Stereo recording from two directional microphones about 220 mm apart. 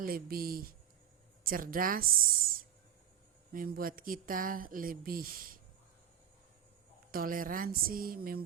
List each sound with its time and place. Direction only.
0.0 s speech: 40° right (ahead or behind)
7.1 s speech: 40° right (ahead or behind)